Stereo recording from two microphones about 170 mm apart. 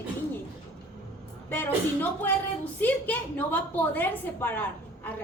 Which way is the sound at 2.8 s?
10° left (ahead or behind).